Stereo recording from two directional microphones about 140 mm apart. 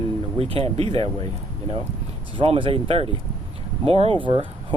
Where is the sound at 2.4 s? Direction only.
35° right (ahead or behind).